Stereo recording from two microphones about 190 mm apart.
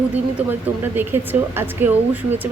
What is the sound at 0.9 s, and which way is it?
Speech, 10° right (ahead or behind).